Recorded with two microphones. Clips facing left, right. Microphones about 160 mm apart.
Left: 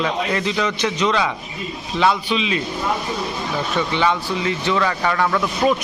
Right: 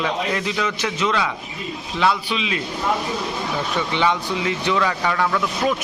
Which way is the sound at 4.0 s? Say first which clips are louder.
Right 1 dB; 15° right (ahead or behind).